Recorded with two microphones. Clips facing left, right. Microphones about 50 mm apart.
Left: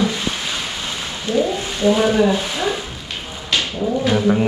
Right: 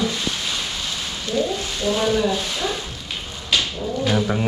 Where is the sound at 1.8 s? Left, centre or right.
Centre.